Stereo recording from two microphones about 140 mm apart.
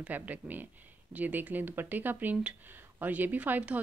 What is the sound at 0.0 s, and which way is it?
Speech, 10° right (ahead or behind).